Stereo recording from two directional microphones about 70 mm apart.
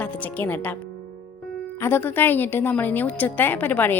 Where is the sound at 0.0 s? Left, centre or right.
Left.